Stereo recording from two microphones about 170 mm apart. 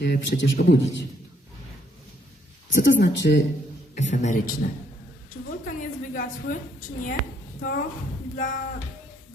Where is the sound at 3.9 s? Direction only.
45° left (ahead or behind).